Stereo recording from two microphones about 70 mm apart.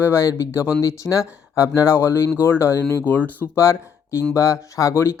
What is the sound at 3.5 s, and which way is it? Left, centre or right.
Speech, left.